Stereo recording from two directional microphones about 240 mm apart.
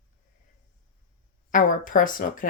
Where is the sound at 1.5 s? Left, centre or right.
Left.